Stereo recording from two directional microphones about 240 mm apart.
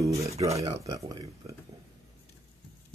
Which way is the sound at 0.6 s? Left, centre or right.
Centre.